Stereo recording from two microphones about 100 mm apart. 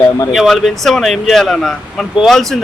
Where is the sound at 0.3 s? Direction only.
Centre (ahead or behind).